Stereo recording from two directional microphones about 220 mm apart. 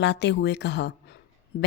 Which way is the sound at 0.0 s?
50° left (ahead or behind).